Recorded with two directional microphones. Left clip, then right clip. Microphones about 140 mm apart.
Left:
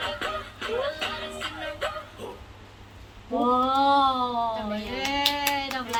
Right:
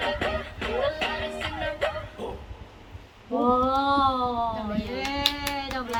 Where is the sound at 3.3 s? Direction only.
10° left (ahead or behind).